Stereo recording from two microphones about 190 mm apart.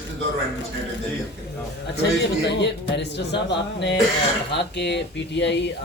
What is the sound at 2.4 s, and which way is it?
Speech, 65° left (ahead or behind).